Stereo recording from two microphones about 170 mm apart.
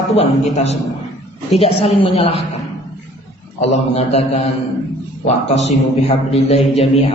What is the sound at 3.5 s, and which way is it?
Speech, 40° left (ahead or behind).